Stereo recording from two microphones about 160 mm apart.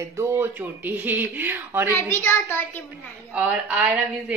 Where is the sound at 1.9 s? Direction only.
15° left (ahead or behind).